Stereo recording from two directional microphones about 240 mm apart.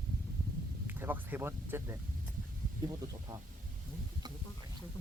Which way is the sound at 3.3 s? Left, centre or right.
Centre.